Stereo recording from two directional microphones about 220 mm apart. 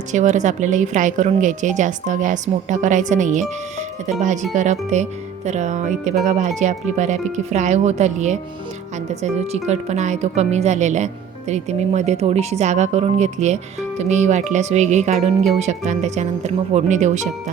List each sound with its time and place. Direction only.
0.1 s speech: 35° right (ahead or behind)
4.5 s speech: 30° right (ahead or behind)